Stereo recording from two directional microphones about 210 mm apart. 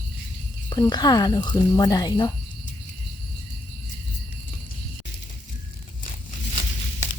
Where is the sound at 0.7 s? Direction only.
20° left (ahead or behind).